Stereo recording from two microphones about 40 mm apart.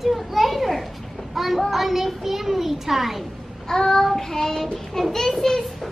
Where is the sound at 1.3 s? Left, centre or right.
Centre.